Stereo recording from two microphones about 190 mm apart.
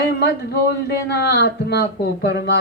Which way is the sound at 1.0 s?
60° left (ahead or behind).